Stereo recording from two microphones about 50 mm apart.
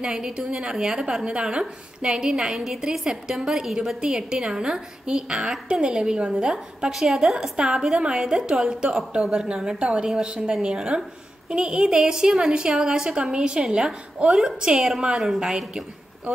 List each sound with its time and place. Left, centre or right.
0.0 s a woman's voice: centre
6.9 s a woman's voice: centre